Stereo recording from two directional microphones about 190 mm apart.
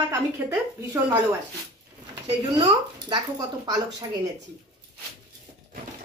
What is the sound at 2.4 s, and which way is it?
Speech, 20° right (ahead or behind).